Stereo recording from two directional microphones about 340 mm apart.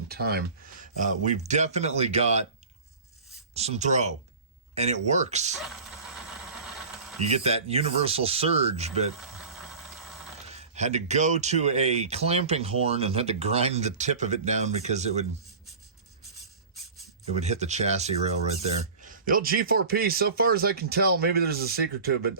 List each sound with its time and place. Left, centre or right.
0.1 s speech: right
3.5 s speech: centre
5.5 s a sound: centre
7.3 s speech: centre
10.5 s speech: centre
17.4 s speech: centre